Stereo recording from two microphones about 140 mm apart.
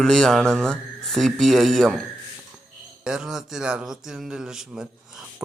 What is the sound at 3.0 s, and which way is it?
Speech, 5° right (ahead or behind).